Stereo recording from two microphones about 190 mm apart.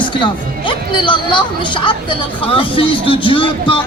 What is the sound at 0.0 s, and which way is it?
A woman's voice, 25° left (ahead or behind).